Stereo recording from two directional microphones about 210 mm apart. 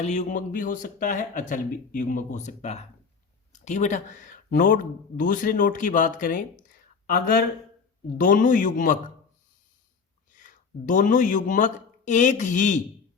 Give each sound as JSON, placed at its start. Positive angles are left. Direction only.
{"t": 0.0, "sound": "speech", "side_deg": 35}
{"t": 8.2, "sound": "speech", "side_deg": 40}
{"t": 10.3, "sound": "speech", "side_deg": 40}